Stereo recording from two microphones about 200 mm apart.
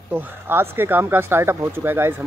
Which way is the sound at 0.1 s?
10° right (ahead or behind).